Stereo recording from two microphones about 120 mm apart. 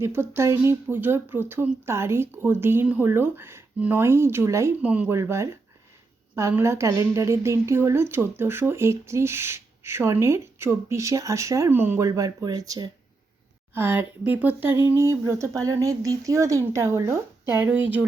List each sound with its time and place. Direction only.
0.0 s speech: 20° right (ahead or behind)
4.8 s speech: 10° right (ahead or behind)
5.1 s speech: 25° right (ahead or behind)
6.6 s speech: 25° right (ahead or behind)
13.7 s speech: 20° right (ahead or behind)
17.6 s speech: 15° right (ahead or behind)